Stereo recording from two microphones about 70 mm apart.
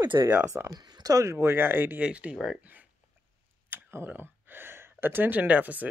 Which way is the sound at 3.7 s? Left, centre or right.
Right.